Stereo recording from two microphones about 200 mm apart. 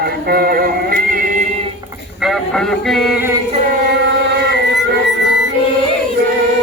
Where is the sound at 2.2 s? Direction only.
Centre (ahead or behind).